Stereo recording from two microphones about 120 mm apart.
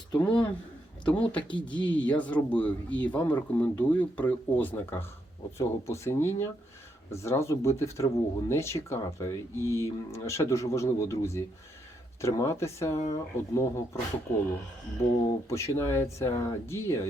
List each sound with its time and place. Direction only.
0.2 s speech: 15° left (ahead or behind)
15.0 s speech: 25° left (ahead or behind)